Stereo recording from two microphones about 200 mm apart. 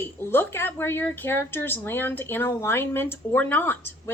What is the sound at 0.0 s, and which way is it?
Speech, 10° left (ahead or behind).